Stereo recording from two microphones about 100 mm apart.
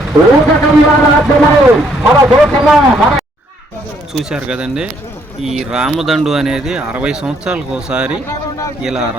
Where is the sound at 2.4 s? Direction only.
Centre (ahead or behind).